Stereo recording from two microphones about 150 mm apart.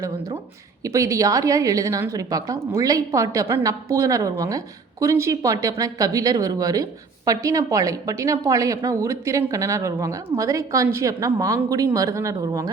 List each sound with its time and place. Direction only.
0.9 s a woman's voice: 20° right (ahead or behind)